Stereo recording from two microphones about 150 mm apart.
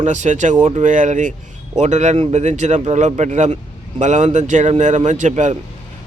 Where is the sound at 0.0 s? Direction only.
50° right (ahead or behind).